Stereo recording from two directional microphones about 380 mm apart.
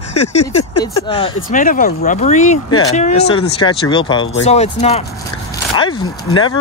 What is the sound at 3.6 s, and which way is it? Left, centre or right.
Speech, centre.